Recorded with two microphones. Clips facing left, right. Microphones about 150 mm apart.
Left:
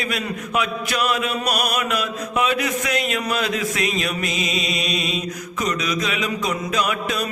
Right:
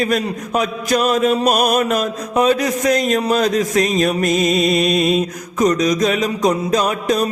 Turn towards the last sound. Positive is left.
turn(degrees=-40)  # may be behind; listen again after turning